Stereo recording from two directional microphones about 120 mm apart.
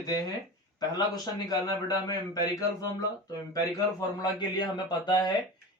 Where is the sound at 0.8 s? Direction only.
35° left (ahead or behind).